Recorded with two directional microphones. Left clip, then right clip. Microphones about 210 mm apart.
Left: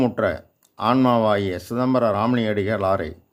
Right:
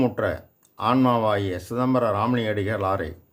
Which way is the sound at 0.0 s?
30° left (ahead or behind).